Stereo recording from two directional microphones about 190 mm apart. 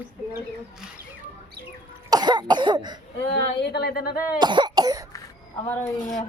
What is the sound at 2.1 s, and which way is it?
Cough, 20° right (ahead or behind).